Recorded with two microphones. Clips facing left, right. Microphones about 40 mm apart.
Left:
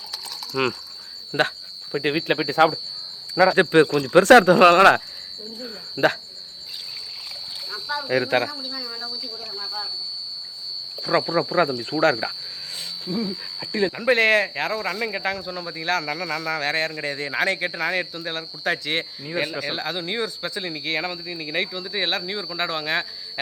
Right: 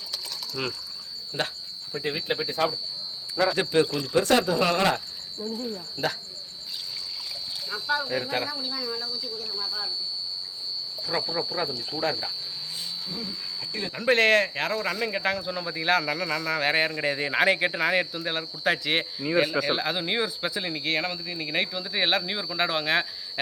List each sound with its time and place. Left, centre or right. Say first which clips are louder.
0.6 s a man's voice: left 10 dB; left
1.9 s speech: left 7 dB; left
3.5 s a man's voice: left 7 dB; left
4.1 s speech: left 11 dB; left
5.6 s speech: left 11 dB; left
7.7 s a sound: right 2 dB; centre
8.0 s speech: left 7 dB; left
8.6 s speech: right 1 dB; centre
9.0 s speech: even; left
11.3 s speech: left 8 dB; left
13.6 s speech: left 11 dB; left
13.9 s speech: left 1 dB; centre